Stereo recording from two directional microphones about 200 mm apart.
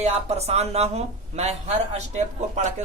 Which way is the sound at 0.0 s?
30° right (ahead or behind).